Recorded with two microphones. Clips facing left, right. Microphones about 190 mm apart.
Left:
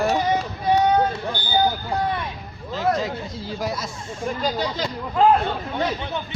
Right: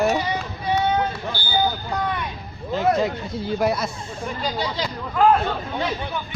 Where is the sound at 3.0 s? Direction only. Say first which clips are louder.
Right 4 dB; 60° right (ahead or behind).